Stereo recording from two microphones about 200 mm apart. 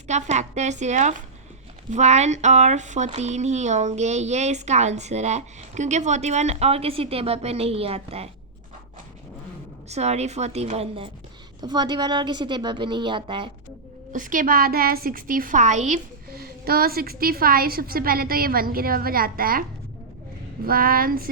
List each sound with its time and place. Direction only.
0.1 s speech: 35° right (ahead or behind)
9.9 s a woman's voice: 35° right (ahead or behind)
14.1 s a woman's voice: 40° right (ahead or behind)
16.3 s a woman's voice: 50° right (ahead or behind)
20.7 s a woman's voice: 45° right (ahead or behind)